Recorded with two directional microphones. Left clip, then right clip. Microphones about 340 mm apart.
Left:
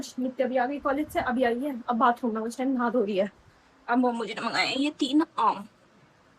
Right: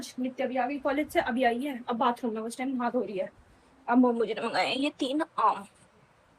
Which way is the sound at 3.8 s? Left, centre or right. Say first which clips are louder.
Right 1 dB; centre.